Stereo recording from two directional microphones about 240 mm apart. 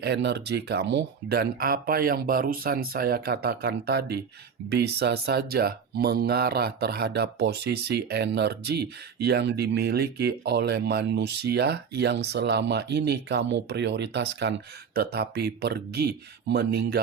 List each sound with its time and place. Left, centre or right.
0.0 s speech: right